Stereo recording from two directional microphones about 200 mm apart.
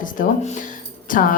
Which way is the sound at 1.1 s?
45° left (ahead or behind).